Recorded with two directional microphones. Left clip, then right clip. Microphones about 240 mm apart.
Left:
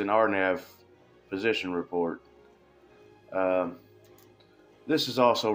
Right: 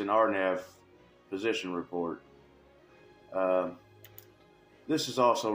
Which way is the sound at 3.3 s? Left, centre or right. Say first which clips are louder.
Left 2 dB; left.